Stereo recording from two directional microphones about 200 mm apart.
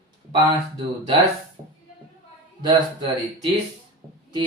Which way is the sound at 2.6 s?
20° right (ahead or behind).